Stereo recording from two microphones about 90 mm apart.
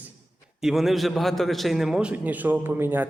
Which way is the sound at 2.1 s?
20° right (ahead or behind).